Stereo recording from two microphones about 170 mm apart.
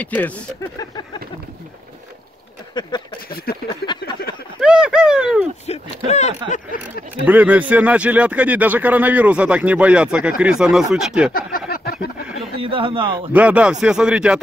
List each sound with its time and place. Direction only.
0.0 s speech: 10° left (ahead or behind)
2.8 s speech: 25° left (ahead or behind)
3.3 s a sound: 65° left (ahead or behind)
4.6 s a sound: 5° right (ahead or behind)
5.7 s speech: 40° left (ahead or behind)
7.2 s speech: 10° right (ahead or behind)
11.3 s a sound: 55° left (ahead or behind)
12.6 s a man's voice: 30° right (ahead or behind)
13.3 s speech: 10° right (ahead or behind)